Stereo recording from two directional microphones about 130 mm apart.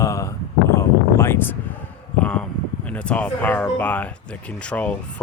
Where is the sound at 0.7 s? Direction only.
20° left (ahead or behind).